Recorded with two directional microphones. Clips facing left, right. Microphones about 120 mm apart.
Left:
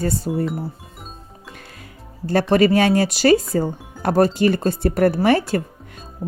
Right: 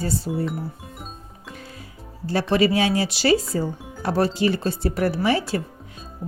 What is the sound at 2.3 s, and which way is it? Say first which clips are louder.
Speech: left 4 dB; 50° left (ahead or behind).